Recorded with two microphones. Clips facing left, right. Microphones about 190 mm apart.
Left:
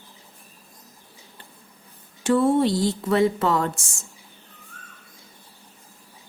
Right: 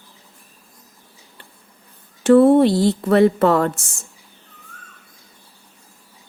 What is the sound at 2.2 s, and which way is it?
Speech, 60° right (ahead or behind).